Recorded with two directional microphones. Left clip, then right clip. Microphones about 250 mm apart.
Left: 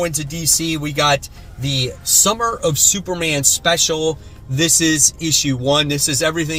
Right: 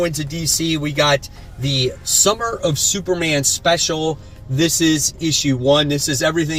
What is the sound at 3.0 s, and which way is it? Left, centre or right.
Speech, centre.